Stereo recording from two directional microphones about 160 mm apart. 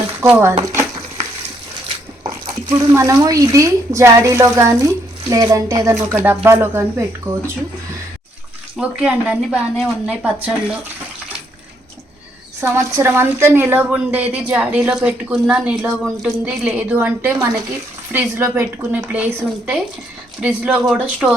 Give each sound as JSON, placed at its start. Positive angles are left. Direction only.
{"t": 0.2, "sound": "a woman's voice", "side_deg": -15}
{"t": 2.9, "sound": "a woman's voice", "side_deg": -20}
{"t": 8.8, "sound": "a woman's voice", "side_deg": -5}
{"t": 12.5, "sound": "a woman's voice", "side_deg": -15}